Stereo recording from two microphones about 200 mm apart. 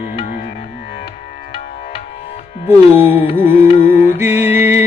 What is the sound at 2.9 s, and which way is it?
Carnatic music, 10° right (ahead or behind).